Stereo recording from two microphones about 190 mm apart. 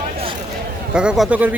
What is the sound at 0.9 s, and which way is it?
Speech, 5° right (ahead or behind).